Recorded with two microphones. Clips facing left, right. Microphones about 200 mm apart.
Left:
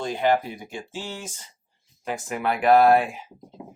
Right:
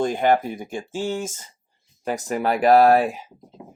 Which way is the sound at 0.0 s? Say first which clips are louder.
Right 3 dB; 50° right (ahead or behind).